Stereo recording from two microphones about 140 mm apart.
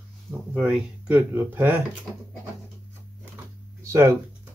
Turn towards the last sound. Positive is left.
turn(degrees=-20)  # may be behind; listen again after turning